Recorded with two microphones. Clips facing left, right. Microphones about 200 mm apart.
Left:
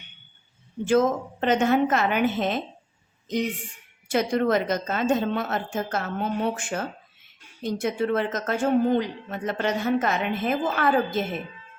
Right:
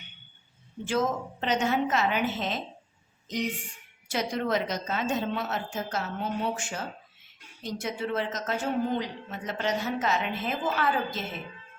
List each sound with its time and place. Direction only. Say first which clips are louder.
0.9 s a woman's voice: left 7 dB; 50° left (ahead or behind)
4.1 s a woman's voice: left 6 dB; 55° left (ahead or behind)